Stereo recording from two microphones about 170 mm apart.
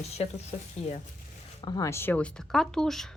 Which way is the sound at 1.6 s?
20° left (ahead or behind).